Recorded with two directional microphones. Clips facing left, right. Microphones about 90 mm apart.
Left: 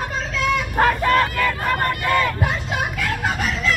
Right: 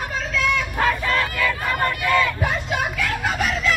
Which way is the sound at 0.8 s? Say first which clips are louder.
Left 6 dB; 40° left (ahead or behind).